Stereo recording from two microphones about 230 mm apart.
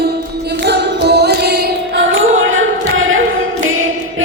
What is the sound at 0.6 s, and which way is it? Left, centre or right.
Music, right.